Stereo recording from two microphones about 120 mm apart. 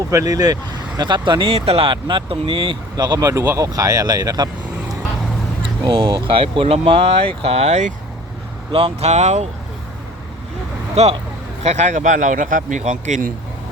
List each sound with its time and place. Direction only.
0.1 s speech: 30° right (ahead or behind)
5.8 s speech: 40° right (ahead or behind)
7.4 s speech: 65° right (ahead or behind)
8.7 s speech: 55° right (ahead or behind)
11.0 s speech: 65° right (ahead or behind); by 13.2 s 85° right